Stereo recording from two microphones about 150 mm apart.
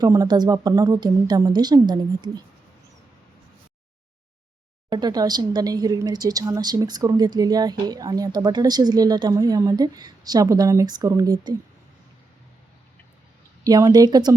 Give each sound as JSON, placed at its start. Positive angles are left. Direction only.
{"t": 0.0, "sound": "speech", "side_deg": -25}
{"t": 4.9, "sound": "speech", "side_deg": -30}
{"t": 13.7, "sound": "speech", "side_deg": -25}